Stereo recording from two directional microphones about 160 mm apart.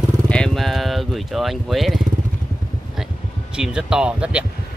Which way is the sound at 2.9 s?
5° right (ahead or behind).